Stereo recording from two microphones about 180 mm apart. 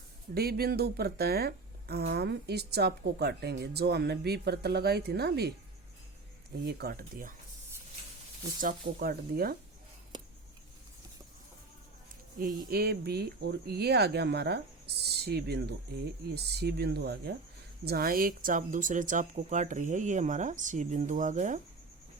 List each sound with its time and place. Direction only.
0.3 s speech: 60° right (ahead or behind)
6.7 s speech: 60° right (ahead or behind)
8.6 s speech: 55° right (ahead or behind)
10.1 s a sound: 25° right (ahead or behind)
12.4 s speech: 55° right (ahead or behind)